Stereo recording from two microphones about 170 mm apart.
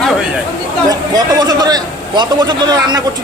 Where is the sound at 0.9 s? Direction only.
25° right (ahead or behind).